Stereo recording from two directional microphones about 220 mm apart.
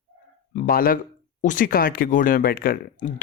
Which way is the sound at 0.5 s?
40° left (ahead or behind).